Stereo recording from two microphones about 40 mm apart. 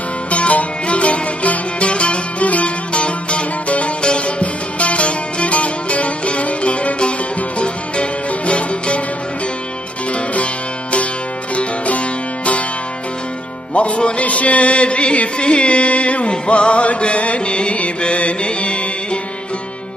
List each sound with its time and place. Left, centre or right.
0.3 s music: left
10.1 s music: left
11.5 s music: left
13.7 s music: left